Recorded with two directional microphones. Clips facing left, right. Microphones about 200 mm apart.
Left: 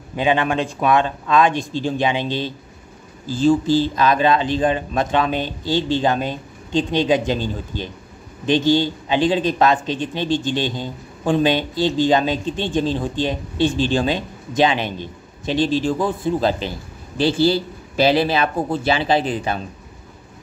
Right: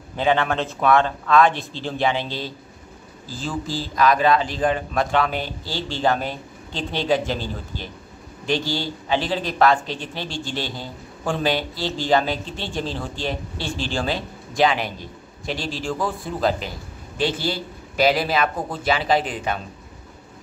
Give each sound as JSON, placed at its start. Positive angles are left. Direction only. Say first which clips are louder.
{"t": 0.1, "sound": "a man's voice", "louder": "left 2 dB", "side_deg": 15}